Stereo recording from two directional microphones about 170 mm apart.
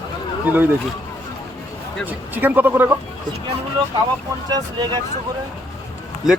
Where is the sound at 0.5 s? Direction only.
10° right (ahead or behind).